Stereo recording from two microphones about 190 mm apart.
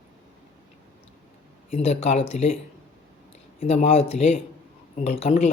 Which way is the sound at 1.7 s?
35° left (ahead or behind).